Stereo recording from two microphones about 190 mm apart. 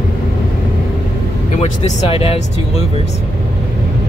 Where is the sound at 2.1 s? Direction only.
30° left (ahead or behind).